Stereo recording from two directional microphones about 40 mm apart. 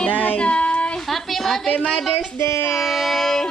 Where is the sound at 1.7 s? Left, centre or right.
Left.